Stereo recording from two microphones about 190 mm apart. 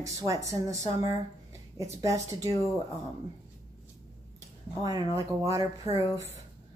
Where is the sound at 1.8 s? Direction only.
15° right (ahead or behind).